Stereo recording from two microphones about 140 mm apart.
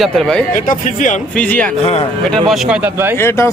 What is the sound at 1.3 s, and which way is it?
Speech, 10° left (ahead or behind).